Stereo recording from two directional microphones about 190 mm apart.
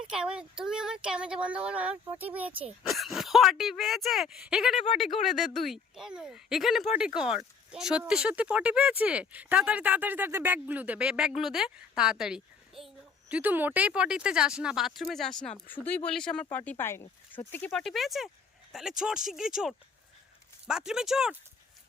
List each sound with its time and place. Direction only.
0.1 s speech: 5° right (ahead or behind)